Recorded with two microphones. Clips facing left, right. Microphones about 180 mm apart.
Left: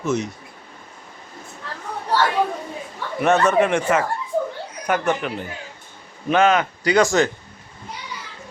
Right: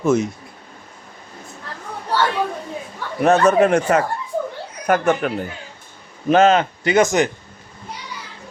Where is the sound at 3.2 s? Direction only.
35° right (ahead or behind); by 7.3 s 20° right (ahead or behind).